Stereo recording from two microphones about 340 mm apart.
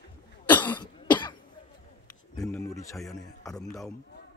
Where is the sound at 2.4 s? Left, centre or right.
Centre.